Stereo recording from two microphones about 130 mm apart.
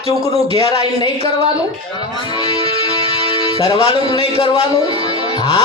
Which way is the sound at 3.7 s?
50° right (ahead or behind).